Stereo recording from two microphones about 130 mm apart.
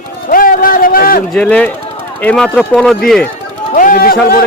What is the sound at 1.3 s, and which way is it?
A man's voice, 10° left (ahead or behind).